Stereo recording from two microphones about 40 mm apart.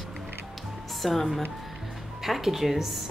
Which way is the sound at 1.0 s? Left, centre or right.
Centre.